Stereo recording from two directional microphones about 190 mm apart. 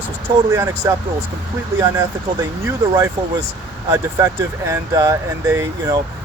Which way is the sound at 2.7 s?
15° right (ahead or behind).